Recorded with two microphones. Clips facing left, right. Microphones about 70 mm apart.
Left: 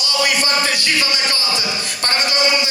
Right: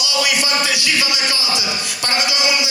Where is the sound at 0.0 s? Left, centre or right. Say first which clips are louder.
Left 1 dB; left.